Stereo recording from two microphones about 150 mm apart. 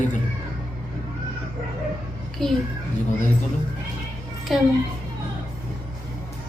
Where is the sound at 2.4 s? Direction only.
Centre (ahead or behind).